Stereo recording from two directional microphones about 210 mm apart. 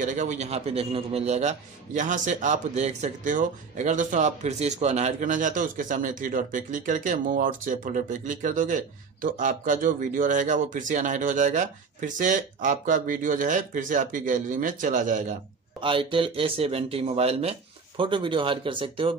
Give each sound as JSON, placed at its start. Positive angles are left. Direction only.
{"t": 0.0, "sound": "a man's voice", "side_deg": -35}
{"t": 15.8, "sound": "speech", "side_deg": -25}